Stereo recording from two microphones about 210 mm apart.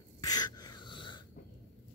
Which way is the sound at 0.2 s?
20° left (ahead or behind).